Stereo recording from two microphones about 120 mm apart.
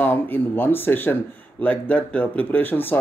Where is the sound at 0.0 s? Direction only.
15° left (ahead or behind).